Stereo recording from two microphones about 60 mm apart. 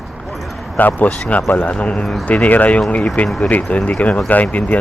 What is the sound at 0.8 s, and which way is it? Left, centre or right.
Speech, left.